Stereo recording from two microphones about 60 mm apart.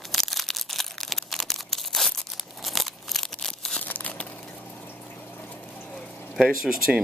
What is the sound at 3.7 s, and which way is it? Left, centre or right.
Crumpling, left.